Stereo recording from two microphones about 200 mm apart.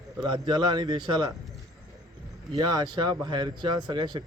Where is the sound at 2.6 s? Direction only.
20° right (ahead or behind).